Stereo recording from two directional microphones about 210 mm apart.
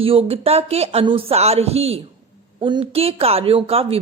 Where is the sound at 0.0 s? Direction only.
25° right (ahead or behind).